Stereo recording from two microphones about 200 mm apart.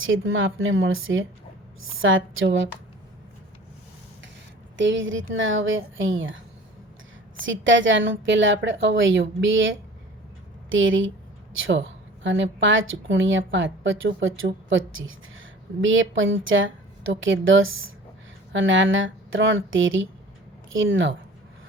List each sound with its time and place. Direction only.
0.0 s a woman's voice: 80° right
4.8 s a woman's voice: 70° right (ahead or behind)
7.4 s a woman's voice: 70° right (ahead or behind)